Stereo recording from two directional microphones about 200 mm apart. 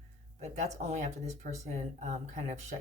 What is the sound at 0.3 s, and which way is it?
Speech, 35° right (ahead or behind).